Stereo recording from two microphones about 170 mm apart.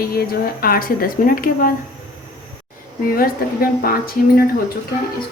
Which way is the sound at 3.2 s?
60° left (ahead or behind).